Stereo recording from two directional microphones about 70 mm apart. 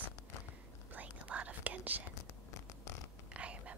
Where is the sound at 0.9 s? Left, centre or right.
Right.